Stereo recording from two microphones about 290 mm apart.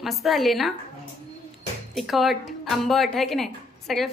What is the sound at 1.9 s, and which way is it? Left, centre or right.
Speech, centre.